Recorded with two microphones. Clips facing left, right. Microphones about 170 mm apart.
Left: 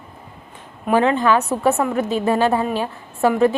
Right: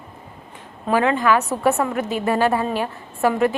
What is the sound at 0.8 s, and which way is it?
Speech, 20° left (ahead or behind).